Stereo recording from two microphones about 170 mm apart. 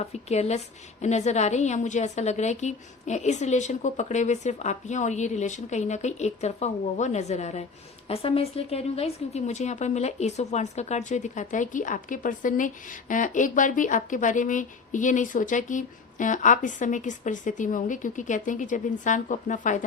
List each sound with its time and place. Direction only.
0.0 s a woman's voice: 40° left (ahead or behind)